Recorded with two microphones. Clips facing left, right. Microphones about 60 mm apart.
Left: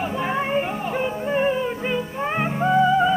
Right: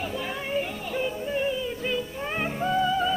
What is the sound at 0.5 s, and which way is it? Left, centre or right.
Music, left.